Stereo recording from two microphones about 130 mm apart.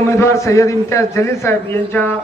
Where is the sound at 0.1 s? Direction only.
20° left (ahead or behind).